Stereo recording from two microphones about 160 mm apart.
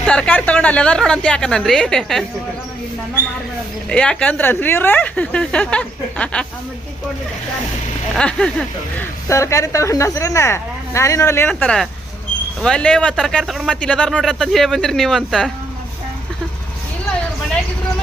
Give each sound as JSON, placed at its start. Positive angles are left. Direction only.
{"t": 0.0, "sound": "a woman's voice", "side_deg": 5}
{"t": 3.8, "sound": "a woman's voice", "side_deg": 5}
{"t": 8.1, "sound": "a woman's voice", "side_deg": 5}
{"t": 9.3, "sound": "speech", "side_deg": 20}
{"t": 11.6, "sound": "a woman's voice", "side_deg": 0}